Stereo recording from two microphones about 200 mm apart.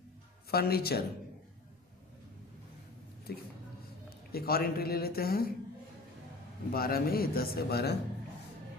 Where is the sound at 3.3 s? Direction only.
50° left (ahead or behind).